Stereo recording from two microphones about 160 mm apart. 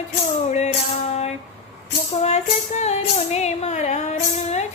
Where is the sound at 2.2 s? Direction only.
45° left (ahead or behind).